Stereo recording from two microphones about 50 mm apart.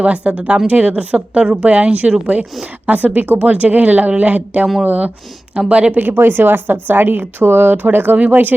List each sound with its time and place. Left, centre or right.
0.0 s speech: right
6.0 s speech: right